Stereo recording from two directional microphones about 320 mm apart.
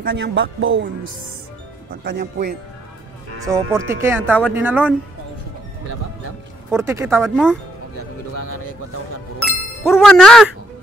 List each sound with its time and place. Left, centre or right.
0.0 s a man's voice: right
2.0 s speech: right
3.4 s speech: centre
6.7 s speech: centre
9.8 s speech: centre